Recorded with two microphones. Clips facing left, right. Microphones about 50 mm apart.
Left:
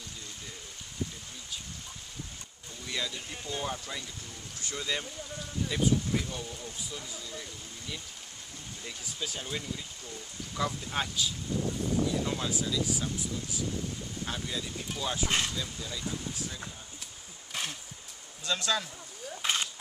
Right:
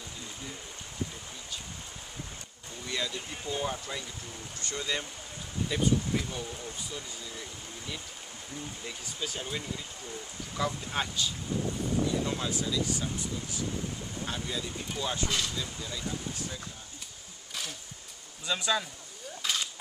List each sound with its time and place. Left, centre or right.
2.9 s speech: centre
8.8 s speech: centre
15.2 s speech: left
15.5 s speech: centre
17.5 s a sound: left
18.4 s speech: centre
19.4 s a sound: left